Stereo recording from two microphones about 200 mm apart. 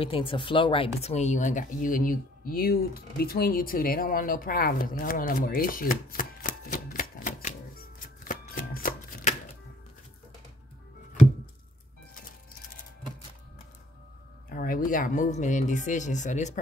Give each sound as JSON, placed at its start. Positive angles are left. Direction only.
{"t": 0.0, "sound": "speech", "side_deg": 25}
{"t": 14.5, "sound": "speech", "side_deg": 45}